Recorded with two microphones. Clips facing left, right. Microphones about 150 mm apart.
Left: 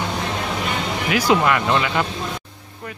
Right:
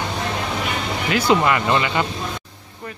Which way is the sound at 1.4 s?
Centre (ahead or behind).